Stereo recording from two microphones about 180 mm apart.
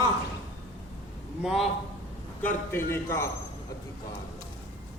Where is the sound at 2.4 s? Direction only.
10° left (ahead or behind).